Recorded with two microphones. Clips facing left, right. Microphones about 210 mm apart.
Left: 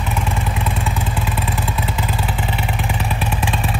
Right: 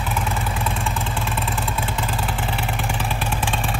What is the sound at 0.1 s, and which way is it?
Vehicle, centre (ahead or behind).